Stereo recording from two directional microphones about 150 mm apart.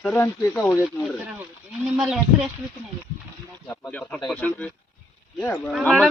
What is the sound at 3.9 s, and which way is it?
Speech, 10° left (ahead or behind).